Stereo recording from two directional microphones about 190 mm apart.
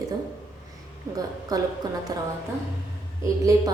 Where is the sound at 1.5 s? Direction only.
20° right (ahead or behind).